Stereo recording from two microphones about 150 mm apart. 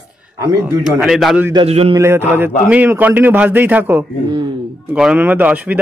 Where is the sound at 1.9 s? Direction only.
15° right (ahead or behind).